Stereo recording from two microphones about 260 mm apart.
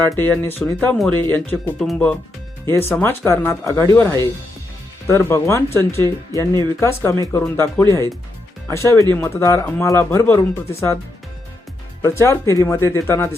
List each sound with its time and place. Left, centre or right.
0.1 s speech: centre
12.0 s speech: centre